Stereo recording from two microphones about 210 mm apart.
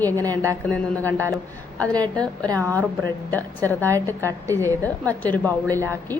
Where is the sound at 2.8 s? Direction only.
10° left (ahead or behind).